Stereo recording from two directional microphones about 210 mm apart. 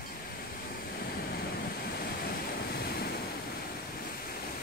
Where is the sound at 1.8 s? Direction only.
45° left (ahead or behind).